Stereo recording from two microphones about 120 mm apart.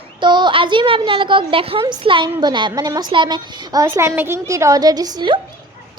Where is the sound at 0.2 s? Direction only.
40° right (ahead or behind).